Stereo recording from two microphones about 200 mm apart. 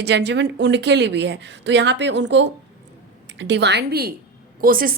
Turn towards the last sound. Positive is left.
turn(degrees=-45)  # may be behind; listen again after turning